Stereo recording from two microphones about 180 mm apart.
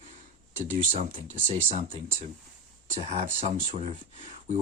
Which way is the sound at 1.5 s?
30° right (ahead or behind).